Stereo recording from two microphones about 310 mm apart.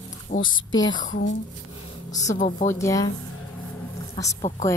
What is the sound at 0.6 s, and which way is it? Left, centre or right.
A woman's voice, left.